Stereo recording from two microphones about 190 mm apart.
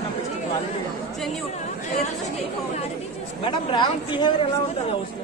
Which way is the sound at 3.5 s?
25° left (ahead or behind).